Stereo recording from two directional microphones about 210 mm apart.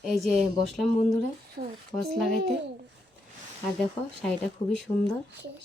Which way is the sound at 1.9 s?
Centre (ahead or behind).